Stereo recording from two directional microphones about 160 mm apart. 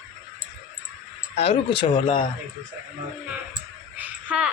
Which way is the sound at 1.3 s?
35° left (ahead or behind).